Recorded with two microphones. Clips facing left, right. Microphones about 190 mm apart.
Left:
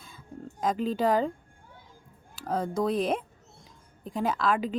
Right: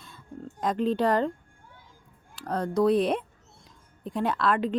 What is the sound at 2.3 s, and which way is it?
Speech, centre (ahead or behind).